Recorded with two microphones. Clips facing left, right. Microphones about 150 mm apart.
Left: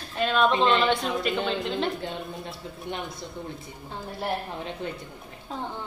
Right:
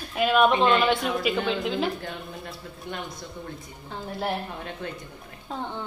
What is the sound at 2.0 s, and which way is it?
Speech, 20° left (ahead or behind).